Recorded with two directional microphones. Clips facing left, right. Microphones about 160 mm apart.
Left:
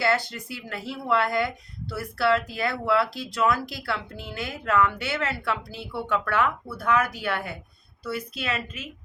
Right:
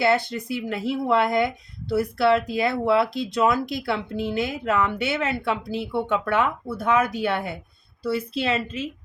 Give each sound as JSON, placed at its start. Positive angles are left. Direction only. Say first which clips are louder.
{"t": 0.0, "sound": "speech", "louder": "right 4 dB", "side_deg": -20}